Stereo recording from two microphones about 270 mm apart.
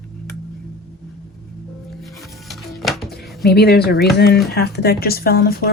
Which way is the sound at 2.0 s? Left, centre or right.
Centre.